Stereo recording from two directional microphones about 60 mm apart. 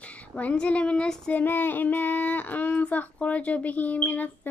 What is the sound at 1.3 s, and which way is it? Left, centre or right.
Child singing, left.